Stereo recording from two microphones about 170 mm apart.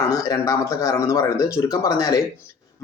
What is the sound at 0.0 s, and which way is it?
A man's voice, 20° left (ahead or behind).